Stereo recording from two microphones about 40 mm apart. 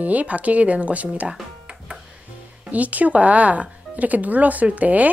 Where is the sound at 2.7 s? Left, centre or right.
Right.